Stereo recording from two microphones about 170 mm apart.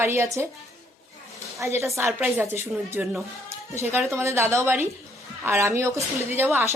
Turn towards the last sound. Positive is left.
turn(degrees=-15)  # may be behind; listen again after turning